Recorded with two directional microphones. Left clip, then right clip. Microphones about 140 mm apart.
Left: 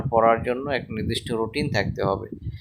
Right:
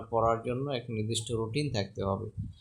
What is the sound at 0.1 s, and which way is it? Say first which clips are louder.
Speech: left 9 dB; 25° left (ahead or behind).